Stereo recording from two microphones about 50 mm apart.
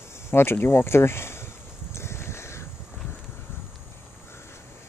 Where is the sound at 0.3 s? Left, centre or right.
Left.